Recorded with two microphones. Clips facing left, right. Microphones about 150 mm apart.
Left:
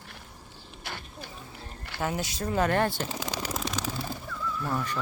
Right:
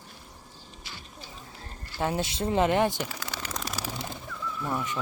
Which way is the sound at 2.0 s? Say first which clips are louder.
Right 2 dB; 25° right (ahead or behind).